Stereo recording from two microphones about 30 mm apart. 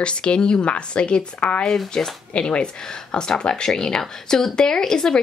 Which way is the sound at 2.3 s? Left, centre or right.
Left.